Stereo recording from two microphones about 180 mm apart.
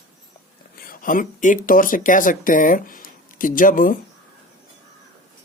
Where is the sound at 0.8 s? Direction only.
50° left (ahead or behind).